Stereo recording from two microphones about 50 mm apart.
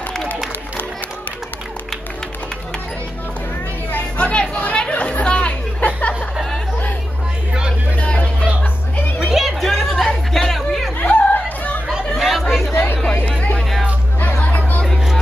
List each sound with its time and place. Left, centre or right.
4.2 s chatter: left
9.2 s chatter: centre
11.1 s chatter: left
12.1 s chatter: centre
12.7 s chatter: left
13.4 s music: left